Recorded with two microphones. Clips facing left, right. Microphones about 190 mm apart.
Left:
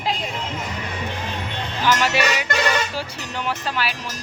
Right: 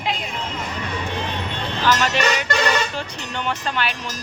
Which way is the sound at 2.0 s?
10° left (ahead or behind).